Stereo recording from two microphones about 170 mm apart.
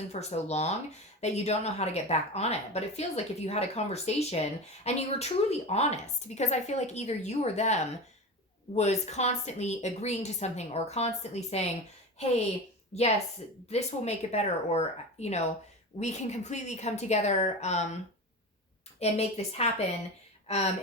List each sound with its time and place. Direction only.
0.1 s a woman's voice: 40° left (ahead or behind)
18.9 s speech: 40° left (ahead or behind)